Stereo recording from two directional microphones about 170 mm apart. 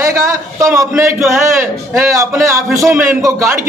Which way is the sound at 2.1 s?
15° right (ahead or behind).